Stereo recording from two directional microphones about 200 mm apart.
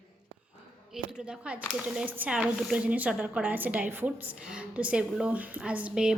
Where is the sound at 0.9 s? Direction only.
5° right (ahead or behind).